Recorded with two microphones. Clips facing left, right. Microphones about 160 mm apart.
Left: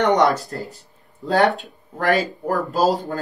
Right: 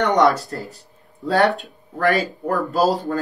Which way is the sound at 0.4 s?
40° left (ahead or behind).